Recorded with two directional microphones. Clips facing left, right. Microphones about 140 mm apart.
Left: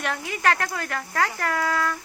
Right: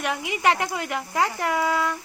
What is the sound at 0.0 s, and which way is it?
Speech, 10° right (ahead or behind).